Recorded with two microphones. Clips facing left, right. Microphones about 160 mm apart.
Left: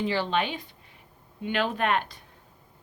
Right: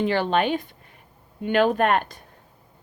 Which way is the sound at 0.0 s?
55° right (ahead or behind).